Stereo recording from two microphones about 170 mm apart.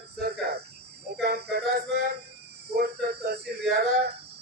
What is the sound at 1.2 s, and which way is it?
Male singing, 70° right (ahead or behind).